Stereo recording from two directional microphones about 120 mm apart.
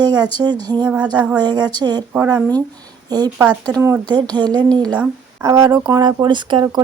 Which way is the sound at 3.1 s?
35° right (ahead or behind).